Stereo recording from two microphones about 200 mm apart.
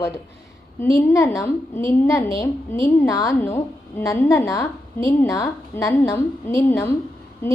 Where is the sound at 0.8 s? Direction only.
15° left (ahead or behind).